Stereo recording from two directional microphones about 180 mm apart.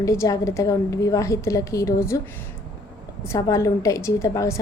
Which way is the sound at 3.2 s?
15° left (ahead or behind).